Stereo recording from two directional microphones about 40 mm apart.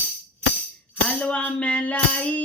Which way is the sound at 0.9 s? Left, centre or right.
Left.